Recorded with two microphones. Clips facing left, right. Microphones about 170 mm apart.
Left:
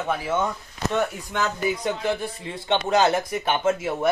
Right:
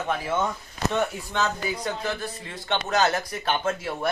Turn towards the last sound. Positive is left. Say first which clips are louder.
# left 4 dB
turn(degrees=15)  # may be behind; listen again after turning